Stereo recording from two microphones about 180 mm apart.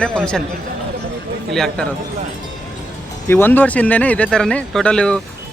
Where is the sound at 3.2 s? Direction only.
10° left (ahead or behind).